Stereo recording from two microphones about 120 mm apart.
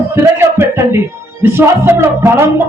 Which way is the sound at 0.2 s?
20° right (ahead or behind).